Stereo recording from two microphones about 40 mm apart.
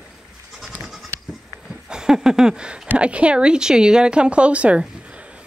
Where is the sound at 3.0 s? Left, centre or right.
Right.